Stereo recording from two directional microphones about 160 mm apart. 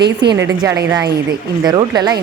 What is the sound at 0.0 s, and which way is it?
Speech, 90° right.